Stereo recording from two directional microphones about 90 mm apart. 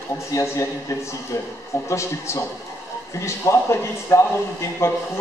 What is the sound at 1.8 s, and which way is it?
A man's voice, 30° left (ahead or behind).